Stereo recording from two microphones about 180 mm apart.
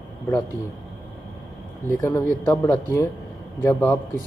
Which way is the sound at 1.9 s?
15° left (ahead or behind).